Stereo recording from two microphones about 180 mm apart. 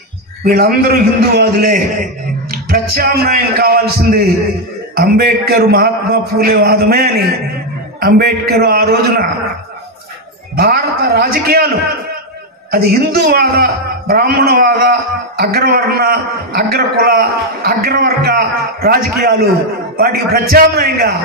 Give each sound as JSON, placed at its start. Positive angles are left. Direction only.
{"t": 0.5, "sound": "a man's voice", "side_deg": -55}
{"t": 10.6, "sound": "a man's voice", "side_deg": -55}
{"t": 12.7, "sound": "a man's voice", "side_deg": -55}